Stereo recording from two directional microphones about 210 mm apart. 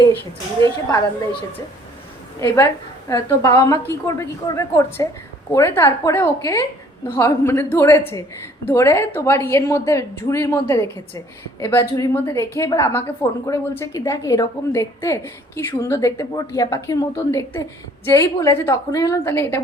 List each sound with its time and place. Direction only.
0.6 s a woman's voice: 15° left (ahead or behind)
3.1 s a woman's voice: 15° left (ahead or behind)